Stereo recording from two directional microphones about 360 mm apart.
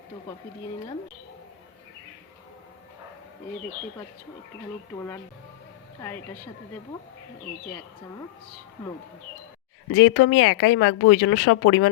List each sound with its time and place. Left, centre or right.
4.9 s speech: centre
9.9 s speech: left